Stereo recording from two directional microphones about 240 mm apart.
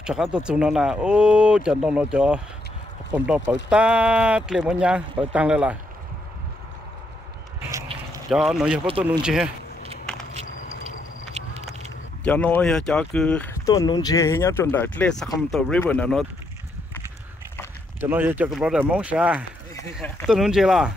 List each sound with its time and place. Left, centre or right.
0.0 s speech: centre
8.3 s speech: centre
10.4 s a sound: left
11.4 s a sound: right
12.3 s speech: centre
18.0 s speech: centre